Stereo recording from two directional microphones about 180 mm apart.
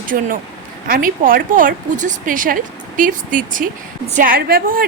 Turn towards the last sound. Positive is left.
turn(degrees=-55)  # may be behind; listen again after turning